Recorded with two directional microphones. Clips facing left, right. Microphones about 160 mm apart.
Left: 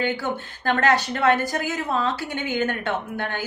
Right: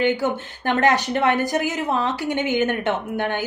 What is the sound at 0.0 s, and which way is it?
A woman's voice, 20° right (ahead or behind).